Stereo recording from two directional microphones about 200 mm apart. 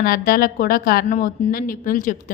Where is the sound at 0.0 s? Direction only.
50° left (ahead or behind).